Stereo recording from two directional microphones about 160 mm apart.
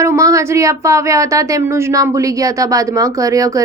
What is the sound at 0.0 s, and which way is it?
A woman's voice, 20° right (ahead or behind).